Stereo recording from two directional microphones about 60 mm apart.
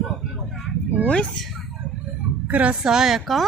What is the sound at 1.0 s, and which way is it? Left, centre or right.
Speech, left.